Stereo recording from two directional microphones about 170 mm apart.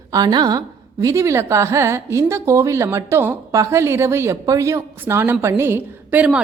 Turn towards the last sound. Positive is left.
turn(degrees=-5)  # may be behind; listen again after turning